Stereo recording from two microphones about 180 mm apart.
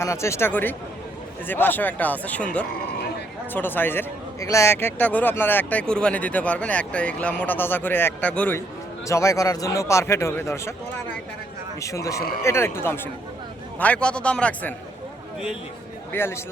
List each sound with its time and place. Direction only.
0.0 s a man's voice: 15° left (ahead or behind)
11.8 s a man's voice: 15° left (ahead or behind)
16.1 s a man's voice: 15° left (ahead or behind)